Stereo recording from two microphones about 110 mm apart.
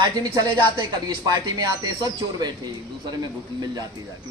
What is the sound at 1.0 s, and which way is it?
Speech, 40° right (ahead or behind).